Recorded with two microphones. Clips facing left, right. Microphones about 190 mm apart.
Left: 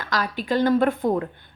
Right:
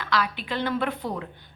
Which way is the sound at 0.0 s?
45° left (ahead or behind).